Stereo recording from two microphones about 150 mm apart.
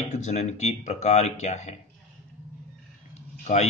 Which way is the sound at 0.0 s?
50° left (ahead or behind).